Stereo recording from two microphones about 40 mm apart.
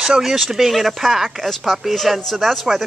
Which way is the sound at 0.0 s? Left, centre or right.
Centre.